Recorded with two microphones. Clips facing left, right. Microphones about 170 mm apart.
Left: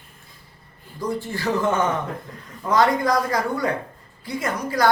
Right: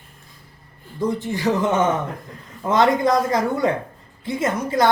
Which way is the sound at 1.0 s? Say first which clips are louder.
Right 4 dB; 20° right (ahead or behind).